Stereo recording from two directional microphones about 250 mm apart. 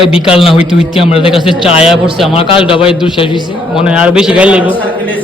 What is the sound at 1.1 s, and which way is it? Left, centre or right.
Speech, left.